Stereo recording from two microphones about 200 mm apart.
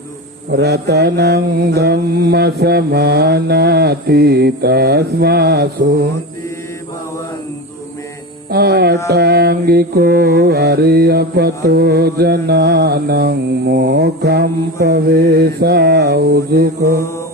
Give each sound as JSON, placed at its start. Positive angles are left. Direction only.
{"t": 0.5, "sound": "mantra", "side_deg": -55}
{"t": 8.4, "sound": "mantra", "side_deg": -50}